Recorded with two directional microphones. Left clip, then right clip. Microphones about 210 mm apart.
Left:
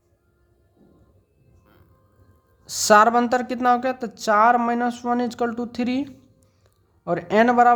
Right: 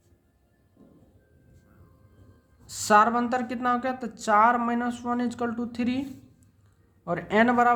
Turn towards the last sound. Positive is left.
turn(degrees=30)  # may be behind; listen again after turning